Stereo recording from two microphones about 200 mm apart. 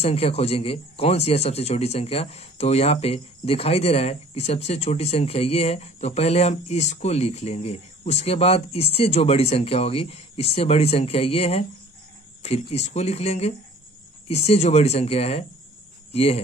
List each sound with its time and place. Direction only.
0.0 s speech: 30° left (ahead or behind)